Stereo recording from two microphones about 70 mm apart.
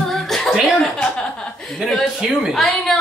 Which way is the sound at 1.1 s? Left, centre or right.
Centre.